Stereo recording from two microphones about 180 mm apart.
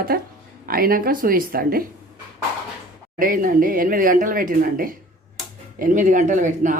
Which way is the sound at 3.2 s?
50° right (ahead or behind).